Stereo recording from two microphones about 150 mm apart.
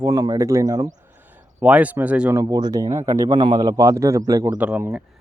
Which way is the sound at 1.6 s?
10° right (ahead or behind).